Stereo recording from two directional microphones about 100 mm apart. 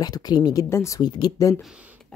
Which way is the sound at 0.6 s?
30° left (ahead or behind).